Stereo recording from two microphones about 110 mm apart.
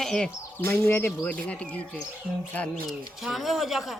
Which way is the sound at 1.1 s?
10° left (ahead or behind).